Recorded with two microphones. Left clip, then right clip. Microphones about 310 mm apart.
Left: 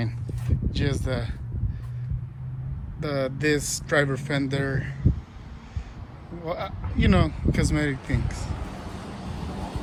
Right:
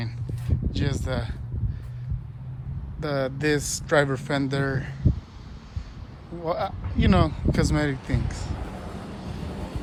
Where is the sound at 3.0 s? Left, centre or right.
Centre.